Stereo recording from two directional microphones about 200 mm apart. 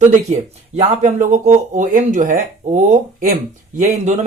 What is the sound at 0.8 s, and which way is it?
Speech, 35° right (ahead or behind).